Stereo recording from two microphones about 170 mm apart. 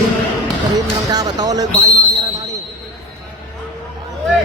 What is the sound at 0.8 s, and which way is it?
Speech, 25° right (ahead or behind).